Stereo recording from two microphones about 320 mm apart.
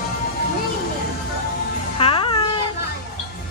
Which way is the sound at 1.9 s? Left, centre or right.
Centre.